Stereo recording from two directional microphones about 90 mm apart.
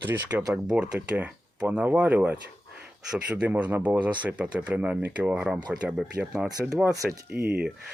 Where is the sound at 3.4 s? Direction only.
15° right (ahead or behind).